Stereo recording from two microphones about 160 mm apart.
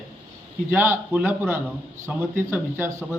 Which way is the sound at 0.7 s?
10° right (ahead or behind).